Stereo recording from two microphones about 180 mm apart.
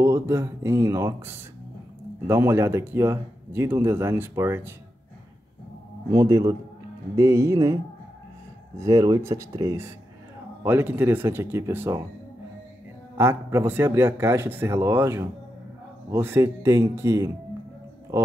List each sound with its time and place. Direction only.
0.0 s speech: 15° right (ahead or behind)
6.1 s a man's voice: 20° right (ahead or behind)
13.2 s speech: 15° right (ahead or behind)